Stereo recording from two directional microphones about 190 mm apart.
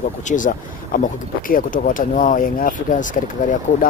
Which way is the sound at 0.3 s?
45° left (ahead or behind).